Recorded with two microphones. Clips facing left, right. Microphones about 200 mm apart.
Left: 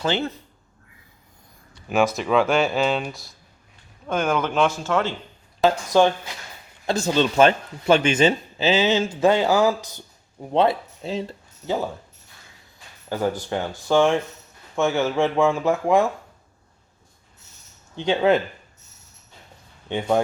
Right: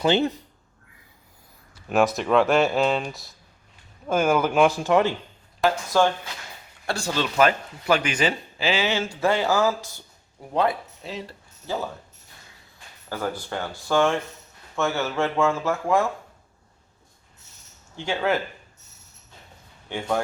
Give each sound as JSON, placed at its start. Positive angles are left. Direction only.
{"t": 0.0, "sound": "speech", "side_deg": -15}
{"t": 1.7, "sound": "speech", "side_deg": 0}
{"t": 5.6, "sound": "speech", "side_deg": 20}
{"t": 13.5, "sound": "speech", "side_deg": 15}
{"t": 17.9, "sound": "speech", "side_deg": 20}
{"t": 19.9, "sound": "speech", "side_deg": 20}